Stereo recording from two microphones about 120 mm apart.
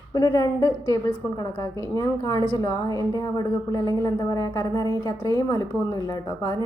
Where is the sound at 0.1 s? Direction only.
30° left (ahead or behind).